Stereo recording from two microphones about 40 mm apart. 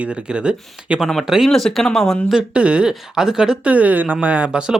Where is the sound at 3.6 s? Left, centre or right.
Right.